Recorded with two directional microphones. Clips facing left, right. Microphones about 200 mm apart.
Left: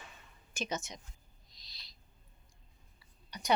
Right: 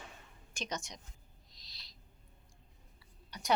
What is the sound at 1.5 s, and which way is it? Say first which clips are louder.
Owl: left 1 dB; centre (ahead or behind).